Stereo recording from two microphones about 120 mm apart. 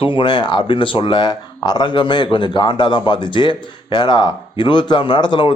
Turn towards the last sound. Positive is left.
turn(degrees=40)  # may be behind; listen again after turning